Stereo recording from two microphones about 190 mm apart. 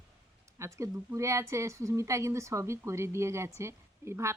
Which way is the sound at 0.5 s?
15° right (ahead or behind).